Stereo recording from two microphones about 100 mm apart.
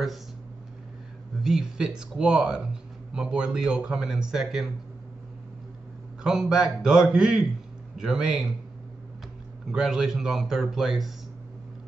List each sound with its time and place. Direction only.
1.4 s speech: 5° right (ahead or behind)
6.2 s speech: 5° right (ahead or behind)
9.7 s a man's voice: 5° right (ahead or behind)